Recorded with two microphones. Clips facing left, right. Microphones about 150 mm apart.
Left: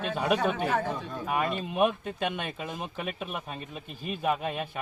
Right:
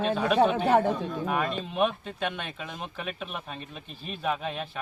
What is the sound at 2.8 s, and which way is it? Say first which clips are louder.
Speech: left 1 dB; 5° left (ahead or behind).